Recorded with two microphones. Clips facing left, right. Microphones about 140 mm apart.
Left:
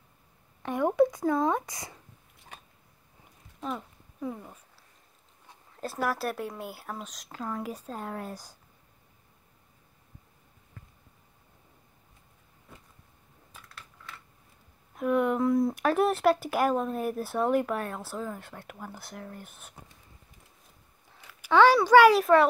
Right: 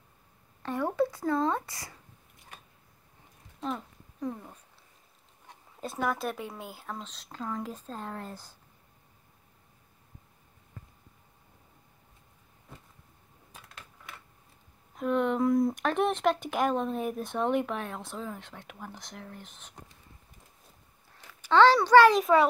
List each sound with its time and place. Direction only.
0.6 s speech: 15° left (ahead or behind)
3.6 s a sound: 5° left (ahead or behind)
5.8 s speech: 5° left (ahead or behind)
15.0 s speech: 10° left (ahead or behind)
21.3 s a child's voice: 10° left (ahead or behind)
22.2 s speech: centre (ahead or behind)